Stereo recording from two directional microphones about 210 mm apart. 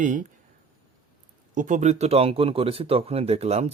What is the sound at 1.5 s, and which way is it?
Speech, 35° right (ahead or behind).